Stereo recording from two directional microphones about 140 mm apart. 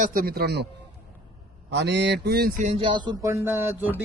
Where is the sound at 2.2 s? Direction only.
90° right.